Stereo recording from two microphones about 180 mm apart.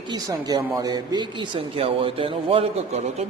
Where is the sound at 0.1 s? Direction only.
20° right (ahead or behind).